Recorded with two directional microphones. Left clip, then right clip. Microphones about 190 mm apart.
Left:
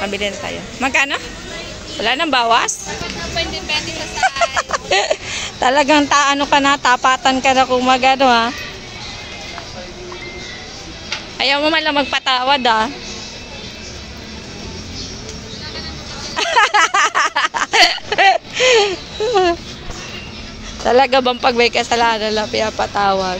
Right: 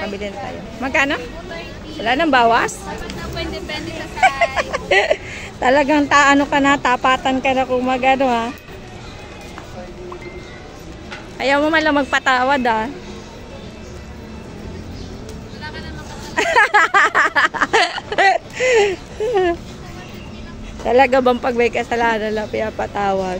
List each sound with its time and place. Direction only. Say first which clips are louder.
0.0 s speech: left 5 dB; 5° left (ahead or behind)
3.3 s speech: left 7 dB; 60° right (ahead or behind)
4.6 s speech: even; 5° right (ahead or behind)
11.3 s speech: even; 15° right (ahead or behind)
16.3 s a sound: even; 5° right (ahead or behind)
18.1 s a sound: left 2 dB; centre (ahead or behind)
20.8 s speech: left 1 dB; 5° right (ahead or behind)
22.8 s speech: left 4 dB; 20° right (ahead or behind)